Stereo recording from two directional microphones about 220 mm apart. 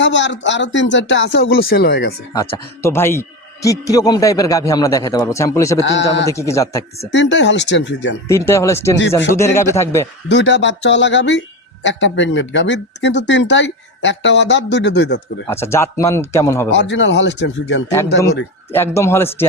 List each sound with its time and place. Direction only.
0.0 s speech: 55° left (ahead or behind)
2.3 s a man's voice: 15° left (ahead or behind)
5.8 s a man's voice: 50° left (ahead or behind)
6.3 s a man's voice: 15° left (ahead or behind)
7.1 s speech: 55° left (ahead or behind)
8.3 s a man's voice: 15° left (ahead or behind)
10.2 s speech: 50° left (ahead or behind)
15.4 s a man's voice: 10° left (ahead or behind)
16.7 s speech: 55° left (ahead or behind)
18.7 s a man's voice: 10° left (ahead or behind)